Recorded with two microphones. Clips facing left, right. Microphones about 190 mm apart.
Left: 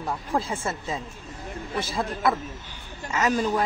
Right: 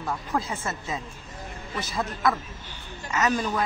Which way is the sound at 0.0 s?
30° left (ahead or behind).